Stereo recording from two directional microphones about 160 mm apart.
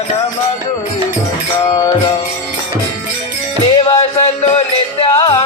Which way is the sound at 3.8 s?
35° left (ahead or behind).